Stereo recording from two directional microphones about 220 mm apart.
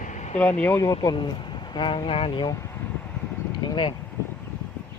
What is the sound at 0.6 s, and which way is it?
Speech, 10° left (ahead or behind).